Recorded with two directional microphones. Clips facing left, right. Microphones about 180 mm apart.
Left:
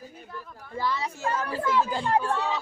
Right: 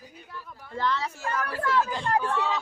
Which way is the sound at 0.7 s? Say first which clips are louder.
Right 1 dB; 10° left (ahead or behind).